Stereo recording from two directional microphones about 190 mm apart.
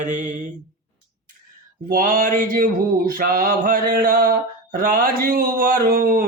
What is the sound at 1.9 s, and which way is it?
Mantra, 45° right (ahead or behind).